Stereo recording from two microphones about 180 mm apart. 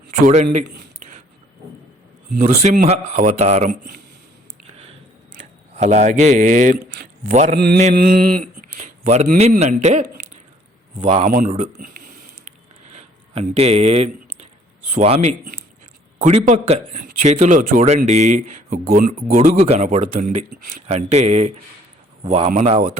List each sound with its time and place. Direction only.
2.4 s a man's voice: 45° right (ahead or behind)
5.3 s speech: 40° right (ahead or behind)
7.5 s a sound: 65° right (ahead or behind)
8.8 s a man's voice: 40° right (ahead or behind)
11.0 s speech: 30° right (ahead or behind)
11.3 s a sound: 45° right (ahead or behind)
14.9 s a man's voice: 35° right (ahead or behind)
19.4 s a man's voice: 35° right (ahead or behind)